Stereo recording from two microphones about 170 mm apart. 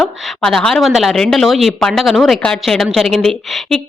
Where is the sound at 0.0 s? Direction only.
5° left (ahead or behind).